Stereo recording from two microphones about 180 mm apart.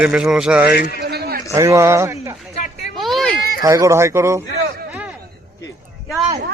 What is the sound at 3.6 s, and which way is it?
Speech, 15° right (ahead or behind).